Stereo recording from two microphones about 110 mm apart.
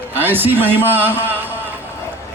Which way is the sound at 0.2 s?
20° right (ahead or behind).